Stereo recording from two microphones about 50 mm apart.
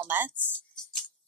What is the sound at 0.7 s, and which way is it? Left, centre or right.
Music, centre.